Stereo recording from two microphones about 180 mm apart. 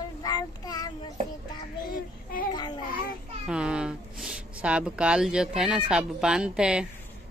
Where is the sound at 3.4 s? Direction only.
5° right (ahead or behind).